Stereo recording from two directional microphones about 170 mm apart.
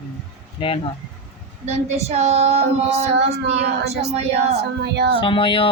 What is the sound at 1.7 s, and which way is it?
Child singing, 40° right (ahead or behind).